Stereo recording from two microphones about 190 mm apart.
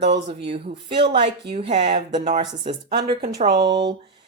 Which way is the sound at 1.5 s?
35° right (ahead or behind).